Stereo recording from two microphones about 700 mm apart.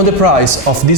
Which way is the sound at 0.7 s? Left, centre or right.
Right.